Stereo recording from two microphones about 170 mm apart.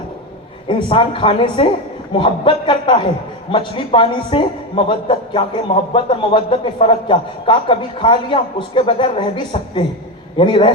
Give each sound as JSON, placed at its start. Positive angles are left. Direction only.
{"t": 0.7, "sound": "a man's voice", "side_deg": 30}